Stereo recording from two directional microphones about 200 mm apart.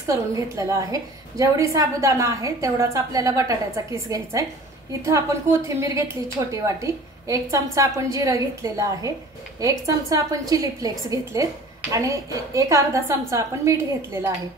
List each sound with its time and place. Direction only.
0.0 s a woman's voice: 15° right (ahead or behind)